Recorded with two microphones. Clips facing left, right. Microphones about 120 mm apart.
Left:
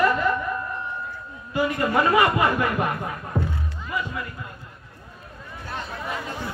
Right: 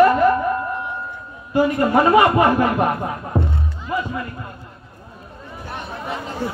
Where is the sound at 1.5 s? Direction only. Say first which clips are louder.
Right 6 dB; 40° right (ahead or behind).